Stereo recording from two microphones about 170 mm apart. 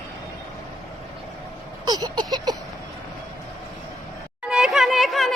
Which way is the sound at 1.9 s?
25° right (ahead or behind).